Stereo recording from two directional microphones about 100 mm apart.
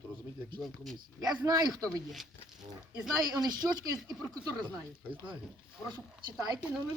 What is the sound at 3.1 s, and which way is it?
Speech, 40° right (ahead or behind).